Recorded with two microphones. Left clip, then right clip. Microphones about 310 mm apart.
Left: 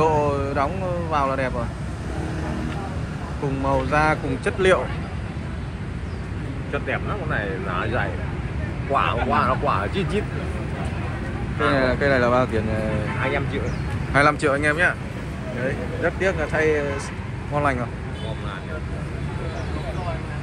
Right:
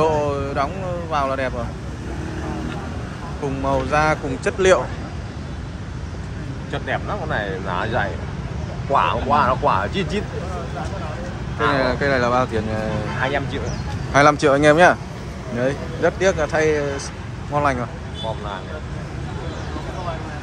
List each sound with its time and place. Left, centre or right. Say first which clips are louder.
0.0 s a sound: right 1 dB; centre
1.1 s speech: right 1 dB; centre
3.6 s speech: right 2 dB; centre
6.7 s speech: right 2 dB; right
11.7 s speech: even; centre
13.2 s speech: right 3 dB; right
14.1 s speech: right 4 dB; centre